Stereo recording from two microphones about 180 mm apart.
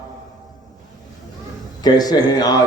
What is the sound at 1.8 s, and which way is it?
Speech, 20° left (ahead or behind).